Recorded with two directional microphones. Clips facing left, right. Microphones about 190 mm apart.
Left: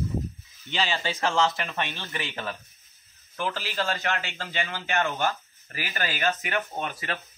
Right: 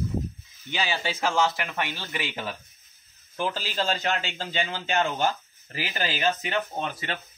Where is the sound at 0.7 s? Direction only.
15° right (ahead or behind).